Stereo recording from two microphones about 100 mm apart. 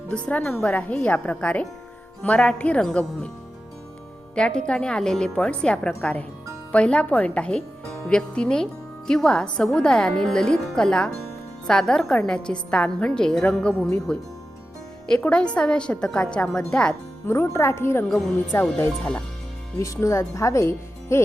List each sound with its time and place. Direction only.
0.1 s a woman's voice: 10° left (ahead or behind)
4.4 s a woman's voice: 10° left (ahead or behind)
15.2 s a woman's voice: 10° left (ahead or behind)
17.2 s speech: 25° left (ahead or behind)
18.1 s speech: centre (ahead or behind)
19.8 s speech: 30° left (ahead or behind)